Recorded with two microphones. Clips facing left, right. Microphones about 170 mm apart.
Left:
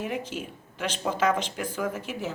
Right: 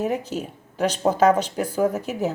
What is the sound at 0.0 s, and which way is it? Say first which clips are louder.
A woman's voice: right 7 dB; 40° right (ahead or behind).